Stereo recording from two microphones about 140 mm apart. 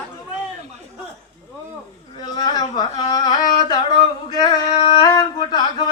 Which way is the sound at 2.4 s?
30° left (ahead or behind).